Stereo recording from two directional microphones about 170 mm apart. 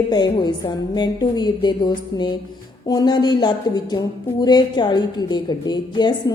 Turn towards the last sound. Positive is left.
turn(degrees=25)  # may be behind; listen again after turning